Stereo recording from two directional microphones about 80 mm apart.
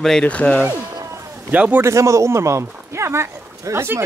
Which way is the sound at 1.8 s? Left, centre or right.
Right.